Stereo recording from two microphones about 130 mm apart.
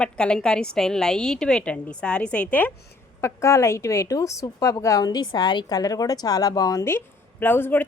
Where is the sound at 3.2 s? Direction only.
20° left (ahead or behind).